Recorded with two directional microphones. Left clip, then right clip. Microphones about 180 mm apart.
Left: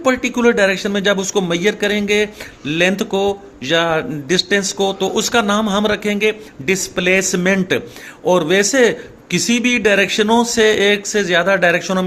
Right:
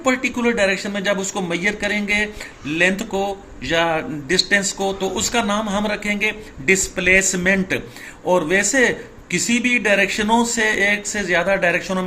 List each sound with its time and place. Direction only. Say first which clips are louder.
0.0 s speech: left 5 dB; 50° left (ahead or behind)